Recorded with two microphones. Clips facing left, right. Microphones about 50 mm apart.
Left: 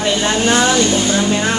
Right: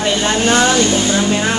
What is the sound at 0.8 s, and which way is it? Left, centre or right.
Speech, centre.